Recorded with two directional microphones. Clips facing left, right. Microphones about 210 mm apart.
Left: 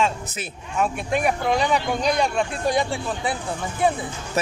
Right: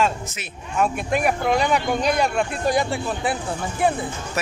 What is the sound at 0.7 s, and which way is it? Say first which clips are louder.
Speech: right 1 dB; centre (ahead or behind).